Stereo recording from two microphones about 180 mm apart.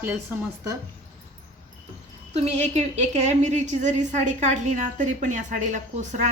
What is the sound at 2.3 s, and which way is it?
A woman's voice, 35° right (ahead or behind).